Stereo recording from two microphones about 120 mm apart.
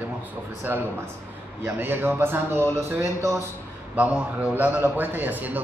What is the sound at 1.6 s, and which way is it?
A man's voice, 15° right (ahead or behind).